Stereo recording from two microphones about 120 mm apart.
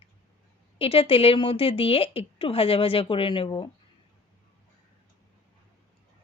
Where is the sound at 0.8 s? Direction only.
55° left (ahead or behind).